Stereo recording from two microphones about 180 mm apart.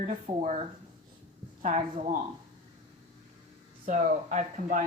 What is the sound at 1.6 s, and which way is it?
Speech, 40° right (ahead or behind).